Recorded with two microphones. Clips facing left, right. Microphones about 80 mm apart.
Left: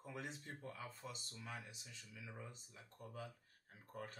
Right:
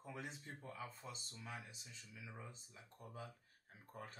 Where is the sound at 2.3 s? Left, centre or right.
Centre.